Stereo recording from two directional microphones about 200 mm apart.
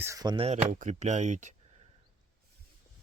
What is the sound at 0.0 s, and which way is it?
Speech, 15° right (ahead or behind).